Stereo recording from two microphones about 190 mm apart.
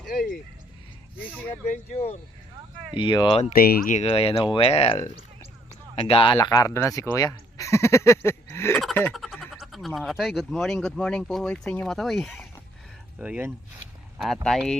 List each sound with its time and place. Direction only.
1.6 s speech: 35° left (ahead or behind)
3.5 s speech: 50° left (ahead or behind)
4.0 s speech: 30° left (ahead or behind)
6.0 s speech: 30° left (ahead or behind); by 13.5 s 5° right (ahead or behind)
14.4 s speech: 5° left (ahead or behind)